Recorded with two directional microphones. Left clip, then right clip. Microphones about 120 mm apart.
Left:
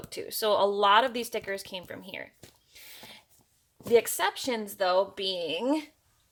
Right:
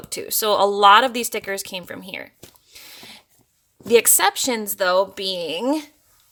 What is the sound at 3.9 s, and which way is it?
Speech, 50° right (ahead or behind).